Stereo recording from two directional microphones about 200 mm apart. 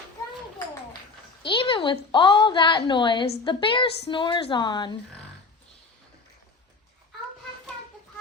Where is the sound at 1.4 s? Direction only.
25° left (ahead or behind).